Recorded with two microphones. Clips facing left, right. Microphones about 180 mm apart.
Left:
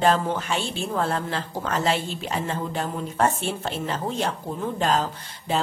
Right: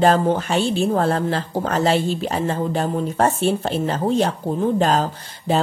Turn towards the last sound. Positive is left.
turn(degrees=-40)  # may be behind; listen again after turning